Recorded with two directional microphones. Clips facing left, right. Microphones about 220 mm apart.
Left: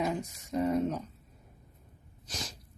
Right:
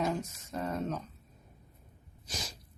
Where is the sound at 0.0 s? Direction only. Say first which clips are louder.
Even; 10° left (ahead or behind).